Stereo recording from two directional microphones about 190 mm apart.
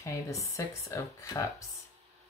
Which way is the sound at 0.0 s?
15° left (ahead or behind).